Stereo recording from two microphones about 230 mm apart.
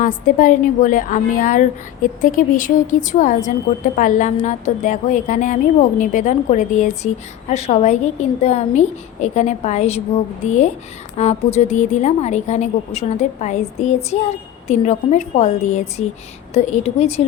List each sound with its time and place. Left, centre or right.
0.0 s a woman's voice: left
11.2 s a woman's voice: left